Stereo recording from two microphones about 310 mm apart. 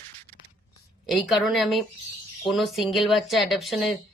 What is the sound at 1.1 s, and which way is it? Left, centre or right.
Speech, centre.